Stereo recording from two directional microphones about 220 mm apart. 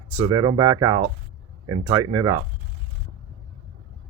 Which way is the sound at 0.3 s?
20° right (ahead or behind).